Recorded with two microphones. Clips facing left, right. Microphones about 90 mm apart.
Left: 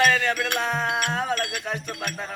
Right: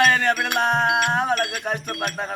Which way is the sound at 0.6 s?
65° right (ahead or behind).